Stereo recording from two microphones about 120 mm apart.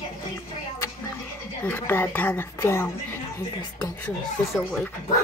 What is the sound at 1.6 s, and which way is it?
Speech, 15° left (ahead or behind).